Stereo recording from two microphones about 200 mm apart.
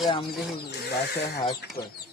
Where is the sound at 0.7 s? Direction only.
55° left (ahead or behind).